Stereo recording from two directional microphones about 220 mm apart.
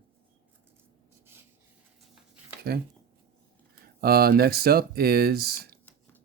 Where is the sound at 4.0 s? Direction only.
45° right (ahead or behind).